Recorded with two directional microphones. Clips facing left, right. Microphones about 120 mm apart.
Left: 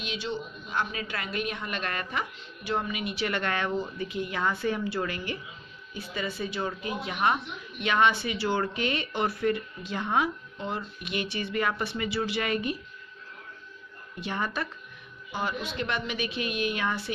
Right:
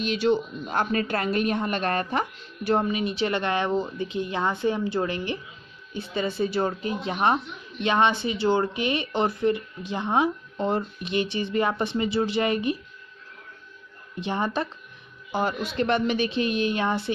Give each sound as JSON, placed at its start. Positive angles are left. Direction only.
{"t": 0.0, "sound": "a woman's voice", "side_deg": -45}
{"t": 10.6, "sound": "a woman's voice", "side_deg": -40}
{"t": 11.1, "sound": "speech", "side_deg": -25}
{"t": 14.2, "sound": "speech", "side_deg": -25}
{"t": 15.7, "sound": "a woman's voice", "side_deg": -40}